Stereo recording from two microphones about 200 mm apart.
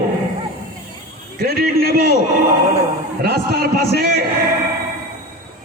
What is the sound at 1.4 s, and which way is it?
Speech, 50° right (ahead or behind).